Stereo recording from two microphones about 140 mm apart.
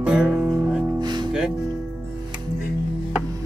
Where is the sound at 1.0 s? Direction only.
30° right (ahead or behind).